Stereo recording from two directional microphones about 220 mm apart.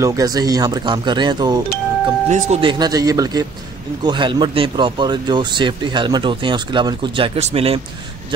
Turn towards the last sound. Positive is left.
turn(degrees=-25)  # may be behind; listen again after turning